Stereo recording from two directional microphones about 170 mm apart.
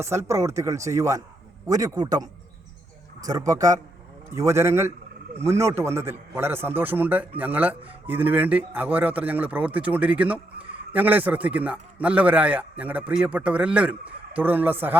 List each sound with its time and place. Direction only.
0.0 s a man's voice: 15° right (ahead or behind)